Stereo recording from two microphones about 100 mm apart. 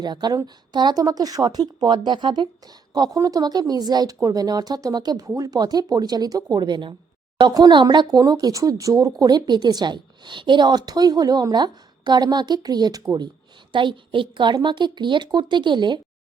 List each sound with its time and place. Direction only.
0.0 s speech: 45° right (ahead or behind)
2.9 s speech: 40° right (ahead or behind)
13.7 s speech: 55° right (ahead or behind)